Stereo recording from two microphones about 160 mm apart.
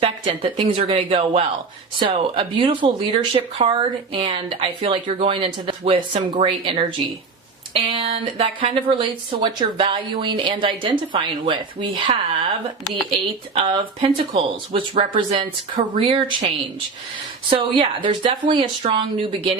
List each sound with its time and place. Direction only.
0.0 s speech: 35° right (ahead or behind)
17.5 s speech: 30° right (ahead or behind)